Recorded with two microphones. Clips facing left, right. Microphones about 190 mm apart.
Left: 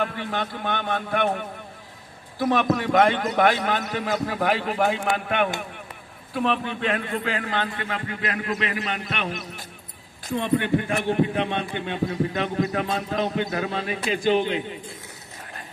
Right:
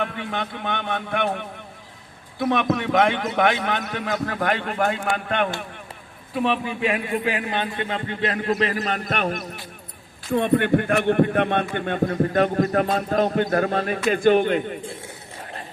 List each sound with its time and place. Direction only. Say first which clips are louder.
0.0 s a man's voice: even; centre (ahead or behind)
6.3 s a man's voice: right 1 dB; 5° right (ahead or behind); by 14.8 s 50° right (ahead or behind)
14.8 s a sound: right 5 dB; 30° right (ahead or behind)